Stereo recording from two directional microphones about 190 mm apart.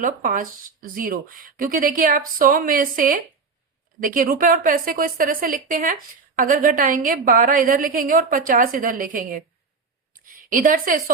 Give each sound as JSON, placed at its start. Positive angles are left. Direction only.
{"t": 0.0, "sound": "a woman's voice", "side_deg": -45}
{"t": 10.5, "sound": "a woman's voice", "side_deg": -45}